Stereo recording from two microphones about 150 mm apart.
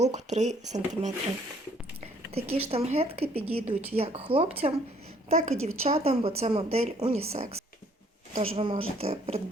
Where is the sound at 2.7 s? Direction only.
45° right (ahead or behind).